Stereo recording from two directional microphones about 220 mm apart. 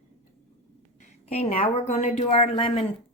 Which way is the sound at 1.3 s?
30° left (ahead or behind).